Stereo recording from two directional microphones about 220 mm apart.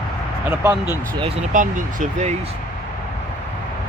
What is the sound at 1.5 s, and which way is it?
Speech, 35° right (ahead or behind).